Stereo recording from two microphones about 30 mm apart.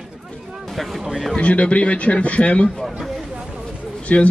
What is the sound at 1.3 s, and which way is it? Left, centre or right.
Speech, left.